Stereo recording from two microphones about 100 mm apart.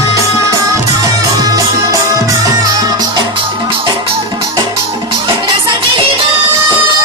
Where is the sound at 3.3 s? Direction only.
55° right (ahead or behind).